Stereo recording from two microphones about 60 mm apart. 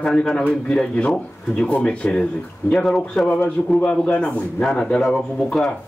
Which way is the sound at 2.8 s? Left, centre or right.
Centre.